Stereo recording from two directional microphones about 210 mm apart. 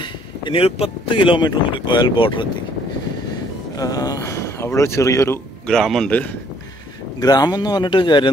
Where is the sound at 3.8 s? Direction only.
15° left (ahead or behind).